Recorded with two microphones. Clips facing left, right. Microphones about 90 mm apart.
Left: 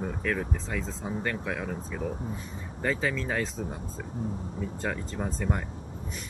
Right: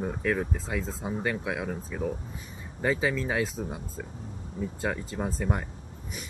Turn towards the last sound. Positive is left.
turn(degrees=-10)  # may be behind; listen again after turning